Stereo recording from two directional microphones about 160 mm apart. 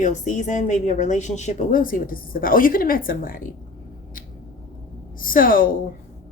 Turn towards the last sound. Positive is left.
turn(degrees=60)  # may be behind; listen again after turning